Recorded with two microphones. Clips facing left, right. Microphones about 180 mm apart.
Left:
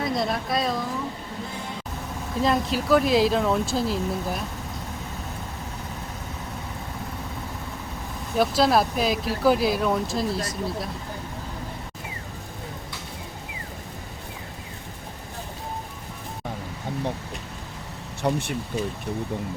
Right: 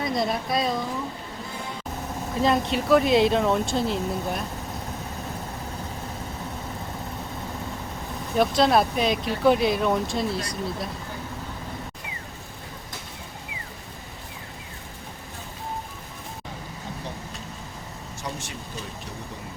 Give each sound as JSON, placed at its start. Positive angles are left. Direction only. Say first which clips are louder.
{"t": 0.0, "sound": "speech", "louder": "even", "side_deg": 0}
{"t": 2.4, "sound": "speech", "louder": "right 1 dB", "side_deg": 0}
{"t": 8.4, "sound": "speech", "louder": "even", "side_deg": 0}
{"t": 18.2, "sound": "speech", "louder": "left 10 dB", "side_deg": 60}